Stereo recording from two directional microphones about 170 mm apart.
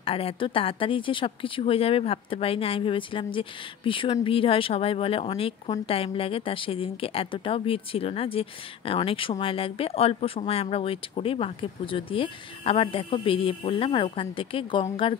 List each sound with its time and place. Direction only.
0.0 s speech: 35° left (ahead or behind)